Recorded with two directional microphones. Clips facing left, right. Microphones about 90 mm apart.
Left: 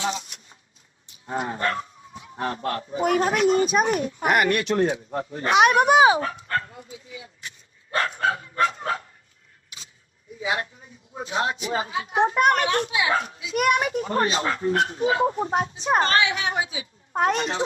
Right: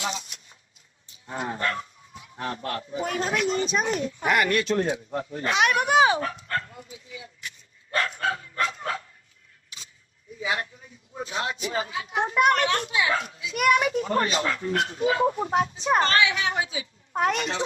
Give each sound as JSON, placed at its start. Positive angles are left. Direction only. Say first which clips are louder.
{"t": 0.1, "sound": "speech", "louder": "left 4 dB", "side_deg": 35}
{"t": 5.4, "sound": "speech", "louder": "left 6 dB", "side_deg": 20}
{"t": 6.2, "sound": "dog", "louder": "left 3 dB", "side_deg": 30}
{"t": 10.4, "sound": "speech", "louder": "left 2 dB", "side_deg": 30}
{"t": 17.2, "sound": "speech", "louder": "left 2 dB", "side_deg": 30}